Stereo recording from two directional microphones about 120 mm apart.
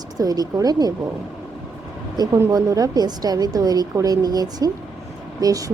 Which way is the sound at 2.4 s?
30° right (ahead or behind).